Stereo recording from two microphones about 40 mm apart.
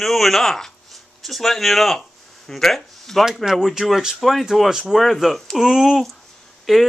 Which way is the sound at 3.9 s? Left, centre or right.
Centre.